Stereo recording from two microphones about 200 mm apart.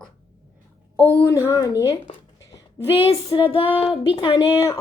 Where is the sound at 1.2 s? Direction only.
15° left (ahead or behind).